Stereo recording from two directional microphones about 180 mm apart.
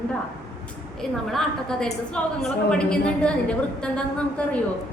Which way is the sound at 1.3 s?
Centre (ahead or behind).